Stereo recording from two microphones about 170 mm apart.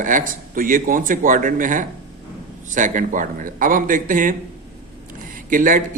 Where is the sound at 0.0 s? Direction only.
50° right (ahead or behind).